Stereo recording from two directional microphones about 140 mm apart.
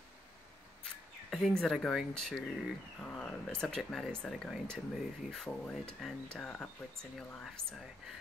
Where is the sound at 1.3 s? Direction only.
Centre (ahead or behind).